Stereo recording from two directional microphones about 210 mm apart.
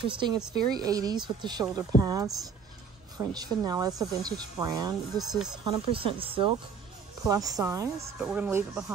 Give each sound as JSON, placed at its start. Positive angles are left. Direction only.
{"t": 0.0, "sound": "speech", "side_deg": -20}